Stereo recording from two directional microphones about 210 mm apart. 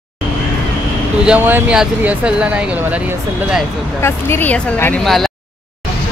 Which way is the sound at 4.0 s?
10° left (ahead or behind).